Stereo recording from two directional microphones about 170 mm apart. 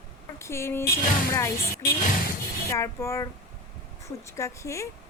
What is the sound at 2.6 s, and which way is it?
A woman's voice, 15° left (ahead or behind).